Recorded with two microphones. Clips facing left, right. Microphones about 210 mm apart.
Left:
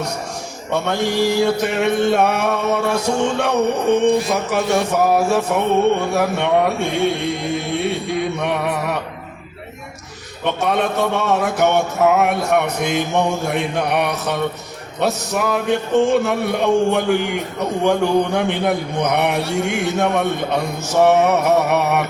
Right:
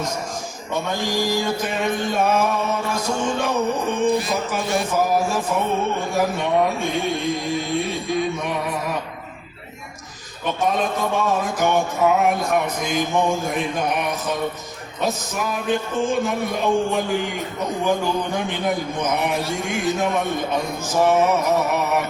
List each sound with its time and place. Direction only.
0.7 s a man's voice: 70° left (ahead or behind)
10.4 s a man's voice: 70° left (ahead or behind)